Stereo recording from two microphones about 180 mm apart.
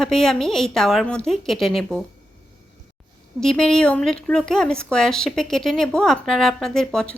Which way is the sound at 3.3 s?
5° left (ahead or behind).